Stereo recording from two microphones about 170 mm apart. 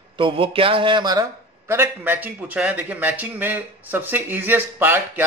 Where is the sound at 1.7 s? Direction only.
15° right (ahead or behind).